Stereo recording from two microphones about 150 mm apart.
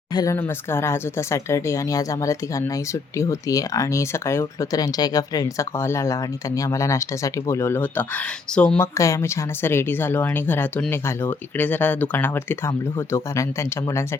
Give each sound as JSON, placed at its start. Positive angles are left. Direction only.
{"t": 0.1, "sound": "speech", "side_deg": 25}
{"t": 0.3, "sound": "speech", "side_deg": 15}
{"t": 9.0, "sound": "speech", "side_deg": 20}